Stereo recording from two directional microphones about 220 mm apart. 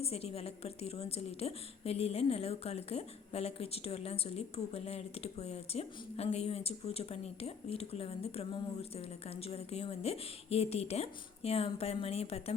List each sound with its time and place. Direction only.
0.0 s a woman's voice: 25° left (ahead or behind)